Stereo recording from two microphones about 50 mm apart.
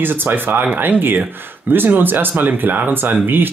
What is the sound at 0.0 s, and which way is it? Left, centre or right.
Speech, right.